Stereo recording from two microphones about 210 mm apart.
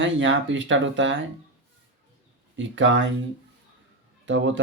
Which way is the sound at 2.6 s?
65° right (ahead or behind).